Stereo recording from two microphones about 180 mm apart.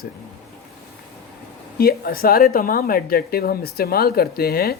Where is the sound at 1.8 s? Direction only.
55° left (ahead or behind).